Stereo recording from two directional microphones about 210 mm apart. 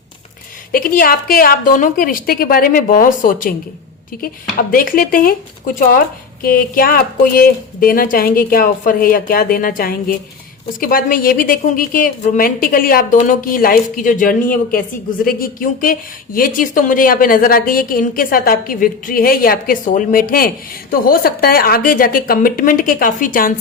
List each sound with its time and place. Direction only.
0.7 s a woman's voice: 40° left (ahead or behind)